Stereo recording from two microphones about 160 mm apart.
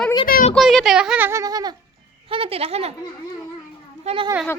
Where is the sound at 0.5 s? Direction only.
Centre (ahead or behind); by 1.7 s 25° right (ahead or behind).